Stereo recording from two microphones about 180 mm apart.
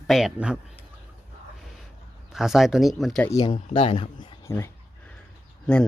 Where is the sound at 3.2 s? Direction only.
25° left (ahead or behind).